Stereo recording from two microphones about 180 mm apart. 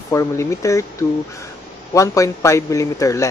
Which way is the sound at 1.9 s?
15° left (ahead or behind).